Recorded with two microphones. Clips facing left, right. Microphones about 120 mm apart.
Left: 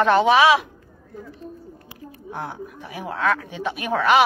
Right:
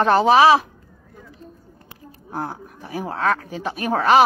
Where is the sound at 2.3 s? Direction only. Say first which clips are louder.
Right 2 dB; 35° right (ahead or behind).